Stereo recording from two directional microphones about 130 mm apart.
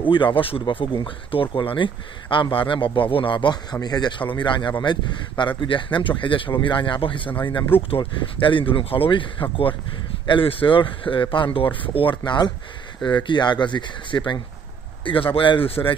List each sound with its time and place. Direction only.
0.1 s speech: 40° left (ahead or behind)